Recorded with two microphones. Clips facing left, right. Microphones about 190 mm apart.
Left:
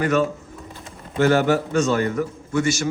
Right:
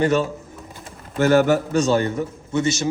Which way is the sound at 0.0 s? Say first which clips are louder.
Right 1 dB; 30° right (ahead or behind).